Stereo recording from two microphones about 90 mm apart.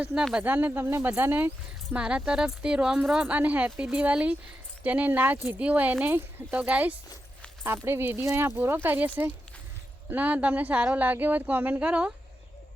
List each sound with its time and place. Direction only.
0.0 s speech: 10° right (ahead or behind)
0.3 s speech: 20° right (ahead or behind)
7.6 s speech: 25° right (ahead or behind)